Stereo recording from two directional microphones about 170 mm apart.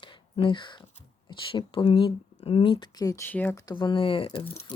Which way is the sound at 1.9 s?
30° left (ahead or behind).